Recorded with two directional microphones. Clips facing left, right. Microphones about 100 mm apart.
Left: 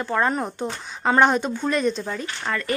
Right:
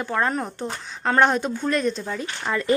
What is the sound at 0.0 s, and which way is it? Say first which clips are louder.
Speech: left 1 dB; centre (ahead or behind).